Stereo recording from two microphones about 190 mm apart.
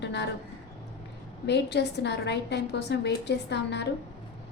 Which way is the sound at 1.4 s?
65° left (ahead or behind).